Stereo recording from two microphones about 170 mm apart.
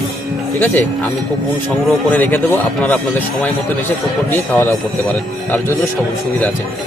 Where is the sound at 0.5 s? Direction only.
10° left (ahead or behind).